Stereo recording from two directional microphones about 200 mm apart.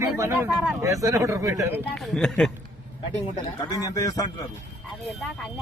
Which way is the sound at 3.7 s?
20° left (ahead or behind).